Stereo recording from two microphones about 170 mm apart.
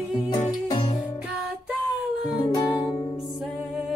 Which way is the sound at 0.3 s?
25° left (ahead or behind).